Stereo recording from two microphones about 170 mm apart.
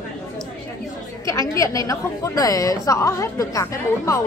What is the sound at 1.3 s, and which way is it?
A woman's voice, 20° left (ahead or behind).